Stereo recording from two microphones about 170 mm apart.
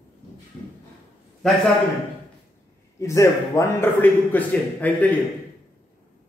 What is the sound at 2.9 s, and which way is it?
A man's voice, 15° left (ahead or behind).